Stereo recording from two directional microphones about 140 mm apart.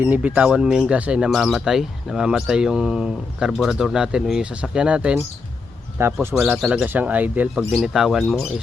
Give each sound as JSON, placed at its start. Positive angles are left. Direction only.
{"t": 0.0, "sound": "speech", "side_deg": -10}
{"t": 6.0, "sound": "speech", "side_deg": -20}
{"t": 6.6, "sound": "speech", "side_deg": 0}
{"t": 6.8, "sound": "speech", "side_deg": -10}
{"t": 7.7, "sound": "speech", "side_deg": 0}